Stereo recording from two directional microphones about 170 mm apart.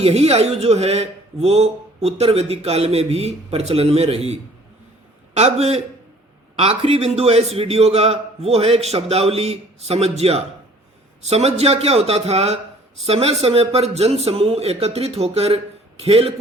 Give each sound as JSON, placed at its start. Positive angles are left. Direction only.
{"t": 0.0, "sound": "speech", "side_deg": -35}